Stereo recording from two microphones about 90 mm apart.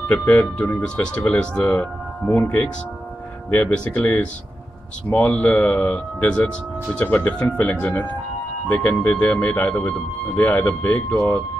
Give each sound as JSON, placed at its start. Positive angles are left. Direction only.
{"t": 0.1, "sound": "speech", "side_deg": 15}